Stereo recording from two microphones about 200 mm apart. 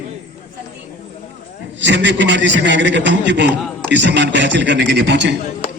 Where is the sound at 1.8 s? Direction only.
60° right (ahead or behind).